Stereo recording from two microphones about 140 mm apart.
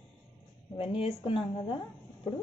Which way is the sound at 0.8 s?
40° left (ahead or behind).